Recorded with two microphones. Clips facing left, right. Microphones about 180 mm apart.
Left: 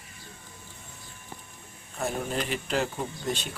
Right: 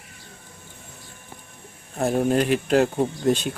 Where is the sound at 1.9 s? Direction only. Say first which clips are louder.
Right 10 dB; 50° right (ahead or behind).